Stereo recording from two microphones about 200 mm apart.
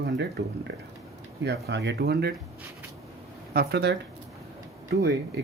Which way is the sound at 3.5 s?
55° right (ahead or behind).